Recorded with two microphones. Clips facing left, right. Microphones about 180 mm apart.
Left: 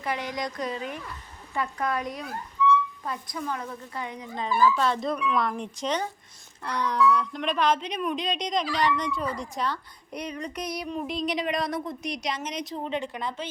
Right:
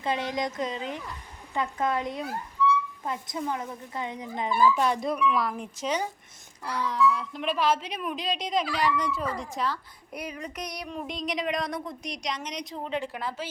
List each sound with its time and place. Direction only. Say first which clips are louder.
0.0 s a woman's voice: right 2 dB; 25° right (ahead or behind); by 13.5 s 5° right (ahead or behind)